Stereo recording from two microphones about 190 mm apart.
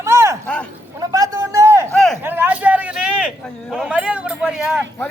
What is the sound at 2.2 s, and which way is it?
A man's voice, 10° right (ahead or behind).